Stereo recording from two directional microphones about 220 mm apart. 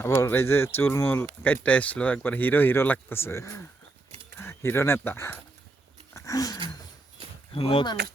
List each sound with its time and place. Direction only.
0.0 s speech: 10° left (ahead or behind)
6.1 s a sound: 15° left (ahead or behind)
7.5 s speech: 25° left (ahead or behind)